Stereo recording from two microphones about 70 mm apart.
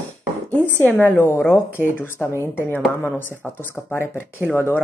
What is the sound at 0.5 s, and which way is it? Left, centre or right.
Speech, left.